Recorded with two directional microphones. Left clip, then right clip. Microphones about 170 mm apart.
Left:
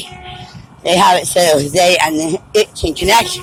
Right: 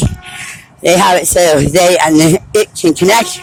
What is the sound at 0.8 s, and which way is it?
Speech, 40° right (ahead or behind).